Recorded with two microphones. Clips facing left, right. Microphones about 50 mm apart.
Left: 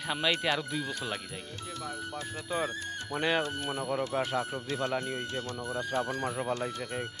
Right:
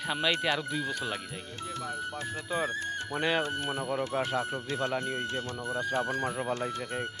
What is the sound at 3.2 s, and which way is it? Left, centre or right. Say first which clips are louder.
Speech: even; centre.